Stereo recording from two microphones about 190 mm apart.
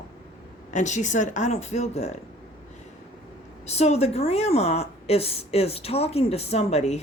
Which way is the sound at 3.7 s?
35° left (ahead or behind).